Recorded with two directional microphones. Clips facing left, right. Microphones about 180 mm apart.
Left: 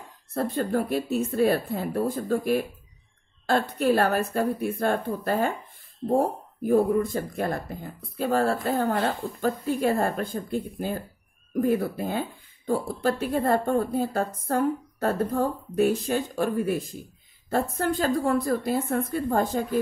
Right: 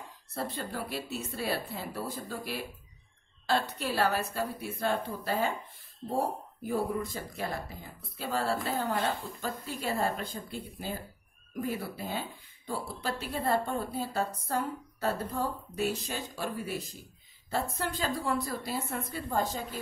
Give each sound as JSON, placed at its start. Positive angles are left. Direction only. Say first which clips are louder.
{"t": 0.3, "sound": "speech", "louder": "left 10 dB", "side_deg": 50}